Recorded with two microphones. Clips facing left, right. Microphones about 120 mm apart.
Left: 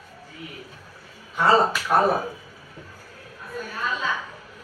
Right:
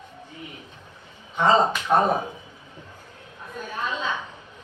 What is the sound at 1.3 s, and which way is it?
Speech, 20° right (ahead or behind).